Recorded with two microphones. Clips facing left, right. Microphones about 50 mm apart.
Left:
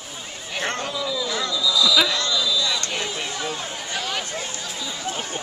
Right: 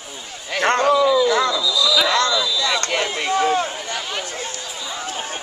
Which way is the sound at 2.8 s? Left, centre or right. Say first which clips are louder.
Right 6 dB; right.